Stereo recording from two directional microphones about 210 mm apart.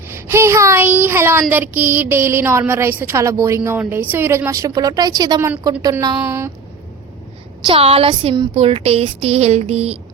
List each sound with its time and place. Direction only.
0.1 s child singing: 10° right (ahead or behind)
7.7 s a woman's voice: 25° right (ahead or behind)